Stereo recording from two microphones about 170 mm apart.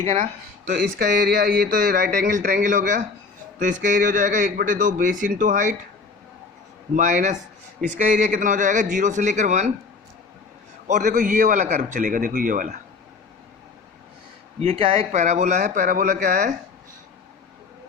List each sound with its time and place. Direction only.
0.0 s a man's voice: 40° right (ahead or behind)
6.9 s a man's voice: 45° right (ahead or behind)
10.8 s a man's voice: 50° right (ahead or behind)
14.6 s speech: 35° right (ahead or behind)
15.2 s a man's voice: 45° right (ahead or behind)